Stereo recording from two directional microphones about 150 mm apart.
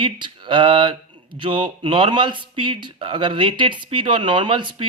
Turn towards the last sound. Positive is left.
turn(degrees=-35)  # may be behind; listen again after turning